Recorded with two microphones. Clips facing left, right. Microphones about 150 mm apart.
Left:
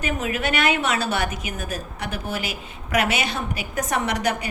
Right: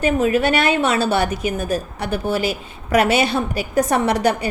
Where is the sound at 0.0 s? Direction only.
30° right (ahead or behind).